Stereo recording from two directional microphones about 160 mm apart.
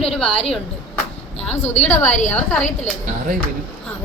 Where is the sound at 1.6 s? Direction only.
15° left (ahead or behind).